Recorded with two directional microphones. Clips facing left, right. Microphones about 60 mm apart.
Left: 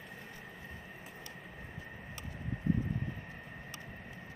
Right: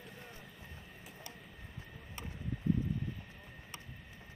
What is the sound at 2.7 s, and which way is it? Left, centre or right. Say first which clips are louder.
Vehicle: even; left.